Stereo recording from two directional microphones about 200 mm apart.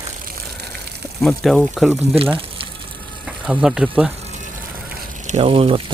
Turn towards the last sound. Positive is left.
turn(degrees=-30)  # may be behind; listen again after turning